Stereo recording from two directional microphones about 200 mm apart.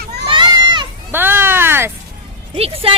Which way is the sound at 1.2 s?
10° right (ahead or behind).